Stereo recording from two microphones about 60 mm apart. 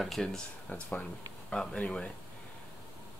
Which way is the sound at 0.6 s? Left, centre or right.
Left.